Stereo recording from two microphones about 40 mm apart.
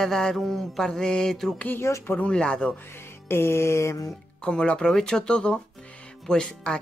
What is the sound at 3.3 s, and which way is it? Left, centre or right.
Music, left.